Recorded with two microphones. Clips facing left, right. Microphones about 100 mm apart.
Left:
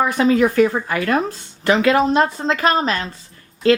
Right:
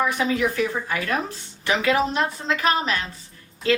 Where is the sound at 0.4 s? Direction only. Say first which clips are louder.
Left 8 dB; 65° left (ahead or behind).